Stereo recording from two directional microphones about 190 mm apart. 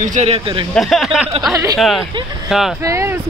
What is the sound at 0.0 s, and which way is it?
Speech, 40° right (ahead or behind).